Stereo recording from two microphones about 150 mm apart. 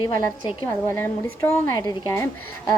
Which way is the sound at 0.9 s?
15° left (ahead or behind).